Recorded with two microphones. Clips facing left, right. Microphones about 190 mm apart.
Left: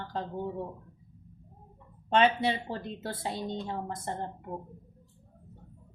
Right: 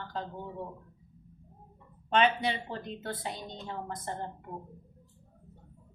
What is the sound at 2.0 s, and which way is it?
Speech, 35° left (ahead or behind).